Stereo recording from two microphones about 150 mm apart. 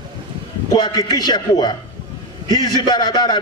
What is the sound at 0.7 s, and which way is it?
A man's voice, 30° left (ahead or behind).